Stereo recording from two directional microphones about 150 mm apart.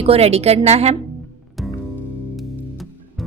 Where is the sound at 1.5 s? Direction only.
Centre (ahead or behind).